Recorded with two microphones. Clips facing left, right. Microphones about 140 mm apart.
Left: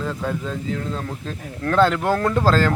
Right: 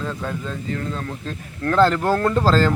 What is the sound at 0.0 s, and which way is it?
A man's voice, 5° left (ahead or behind).